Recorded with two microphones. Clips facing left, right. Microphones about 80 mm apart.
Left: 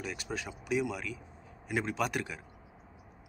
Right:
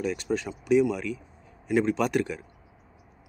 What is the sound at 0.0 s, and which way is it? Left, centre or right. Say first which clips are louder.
Speech: right 10 dB; centre.